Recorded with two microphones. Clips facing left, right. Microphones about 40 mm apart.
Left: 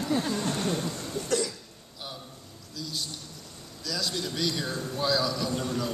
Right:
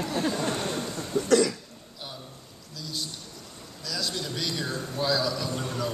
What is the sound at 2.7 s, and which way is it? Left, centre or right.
A man's voice, centre.